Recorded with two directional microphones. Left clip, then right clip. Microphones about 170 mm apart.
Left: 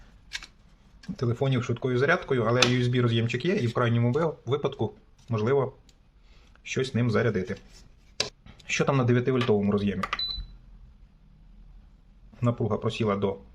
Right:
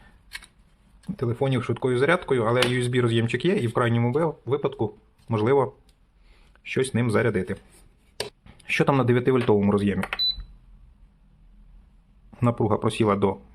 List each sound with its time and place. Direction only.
1.1 s speech: 15° right (ahead or behind)
5.3 s speech: 30° right (ahead or behind)
6.6 s speech: 15° right (ahead or behind)
8.2 s speech: 10° right (ahead or behind); by 10.2 s 30° right (ahead or behind)
12.4 s speech: 35° right (ahead or behind)